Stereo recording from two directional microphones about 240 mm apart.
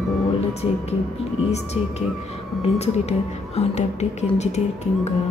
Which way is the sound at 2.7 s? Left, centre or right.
Left.